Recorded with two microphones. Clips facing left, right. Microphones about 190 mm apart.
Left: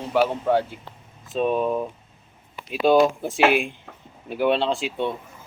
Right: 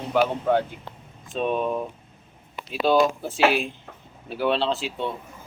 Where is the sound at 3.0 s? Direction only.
15° left (ahead or behind).